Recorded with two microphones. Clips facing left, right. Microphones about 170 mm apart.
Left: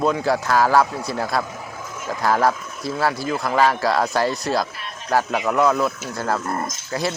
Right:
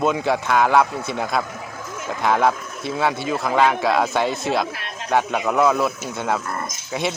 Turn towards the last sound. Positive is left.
turn(degrees=0)  # may be behind; listen again after turning